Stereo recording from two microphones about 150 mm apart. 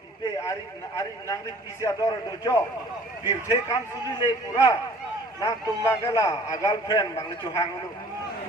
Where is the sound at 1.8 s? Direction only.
20° left (ahead or behind).